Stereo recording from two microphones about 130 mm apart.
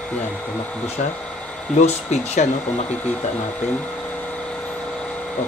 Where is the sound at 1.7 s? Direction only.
60° left (ahead or behind).